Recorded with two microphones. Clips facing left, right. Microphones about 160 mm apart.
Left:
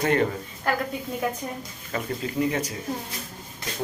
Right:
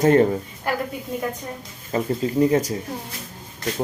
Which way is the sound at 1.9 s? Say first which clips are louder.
Right 7 dB; 35° right (ahead or behind).